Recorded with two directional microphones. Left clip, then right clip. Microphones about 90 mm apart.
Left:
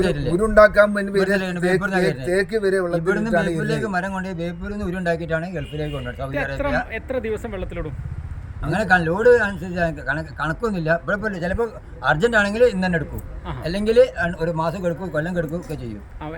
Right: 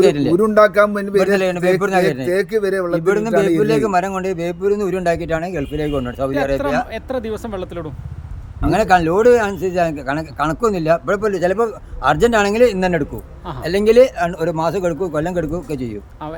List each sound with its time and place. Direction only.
0.0 s a man's voice: 55° right (ahead or behind)
0.4 s a man's voice: 45° right (ahead or behind)